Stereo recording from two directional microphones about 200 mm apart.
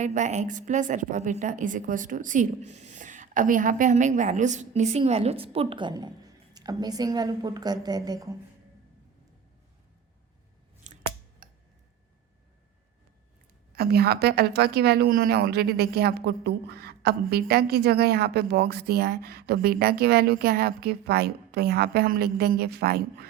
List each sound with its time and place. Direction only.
0.0 s a woman's voice: 35° right (ahead or behind); by 8.4 s 20° right (ahead or behind)
11.4 s tick-tock: 45° right (ahead or behind)
13.7 s a woman's voice: 50° right (ahead or behind)